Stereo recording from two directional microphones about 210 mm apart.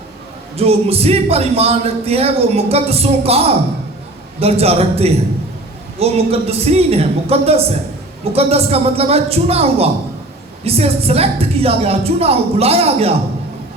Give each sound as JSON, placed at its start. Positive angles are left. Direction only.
{"t": 0.5, "sound": "speech", "side_deg": -30}